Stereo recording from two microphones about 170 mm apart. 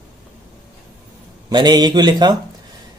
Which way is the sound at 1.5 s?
25° right (ahead or behind).